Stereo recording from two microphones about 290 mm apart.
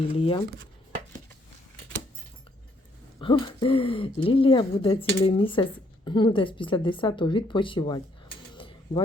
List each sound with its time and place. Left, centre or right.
0.1 s speech: centre
3.2 s speech: centre
8.5 s a sound: centre